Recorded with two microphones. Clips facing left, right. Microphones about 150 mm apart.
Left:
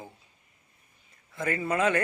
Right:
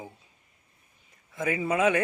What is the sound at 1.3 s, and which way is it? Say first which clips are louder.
Speech: right 2 dB; 10° right (ahead or behind).